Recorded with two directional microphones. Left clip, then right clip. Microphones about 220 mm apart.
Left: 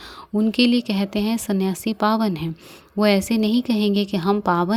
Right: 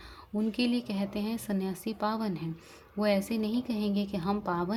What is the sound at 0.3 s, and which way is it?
Speech, 35° left (ahead or behind).